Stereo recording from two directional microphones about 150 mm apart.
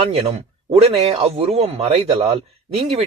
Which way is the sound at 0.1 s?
45° right (ahead or behind).